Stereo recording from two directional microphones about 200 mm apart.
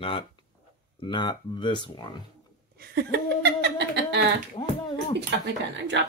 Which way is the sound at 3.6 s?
60° right (ahead or behind).